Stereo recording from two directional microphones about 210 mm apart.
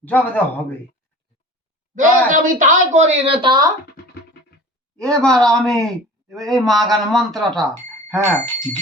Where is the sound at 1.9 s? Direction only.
40° right (ahead or behind).